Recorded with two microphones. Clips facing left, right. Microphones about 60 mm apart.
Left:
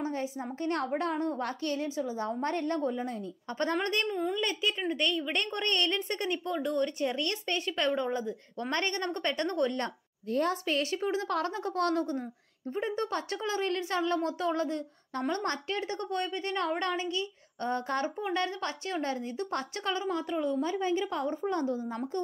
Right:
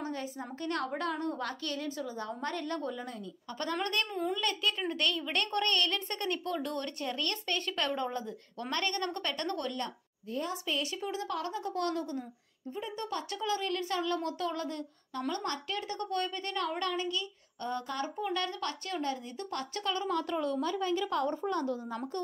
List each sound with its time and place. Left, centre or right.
0.0 s speech: left
3.7 s speech: centre
4.1 s a child's voice: centre
7.1 s a child's voice: centre
8.5 s speech: left
10.5 s speech: left
17.6 s speech: left
18.0 s speech: left
20.0 s a child's voice: centre
20.6 s speech: left